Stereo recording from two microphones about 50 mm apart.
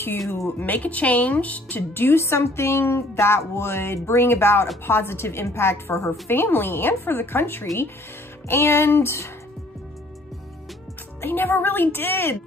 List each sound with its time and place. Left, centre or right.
0.6 s speech: left
2.0 s a woman's voice: left
11.1 s speech: left